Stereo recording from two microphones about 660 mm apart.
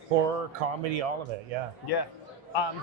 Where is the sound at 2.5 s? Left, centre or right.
Left.